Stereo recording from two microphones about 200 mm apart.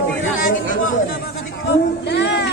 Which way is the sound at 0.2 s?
40° left (ahead or behind).